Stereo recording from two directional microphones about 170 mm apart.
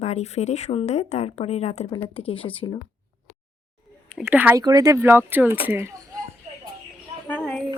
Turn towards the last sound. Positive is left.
turn(degrees=5)  # may be behind; listen again after turning